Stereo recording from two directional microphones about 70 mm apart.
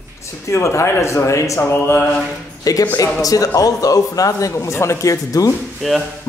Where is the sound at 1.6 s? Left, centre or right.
Left.